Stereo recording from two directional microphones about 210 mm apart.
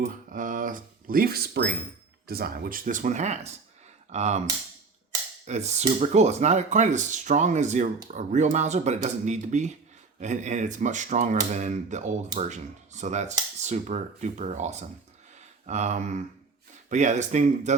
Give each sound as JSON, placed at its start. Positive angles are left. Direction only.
{"t": 0.0, "sound": "speech", "side_deg": -40}
{"t": 5.5, "sound": "speech", "side_deg": -30}